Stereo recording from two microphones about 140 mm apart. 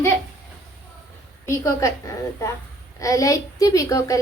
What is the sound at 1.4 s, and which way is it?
A woman's voice, 20° left (ahead or behind).